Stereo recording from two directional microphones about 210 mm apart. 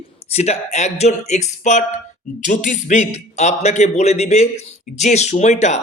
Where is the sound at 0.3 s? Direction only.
30° left (ahead or behind).